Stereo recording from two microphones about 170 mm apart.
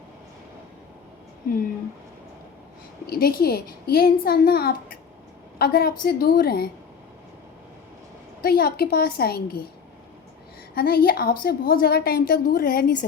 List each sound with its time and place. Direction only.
3.1 s a woman's voice: 60° left (ahead or behind)
8.4 s a woman's voice: 60° left (ahead or behind)
10.8 s a woman's voice: 60° left (ahead or behind)